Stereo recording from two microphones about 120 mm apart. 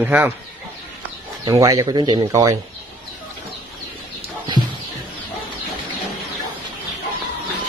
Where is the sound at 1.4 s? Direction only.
30° right (ahead or behind).